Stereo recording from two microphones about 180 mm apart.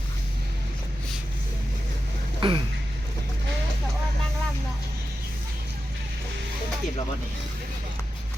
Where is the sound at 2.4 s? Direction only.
25° right (ahead or behind).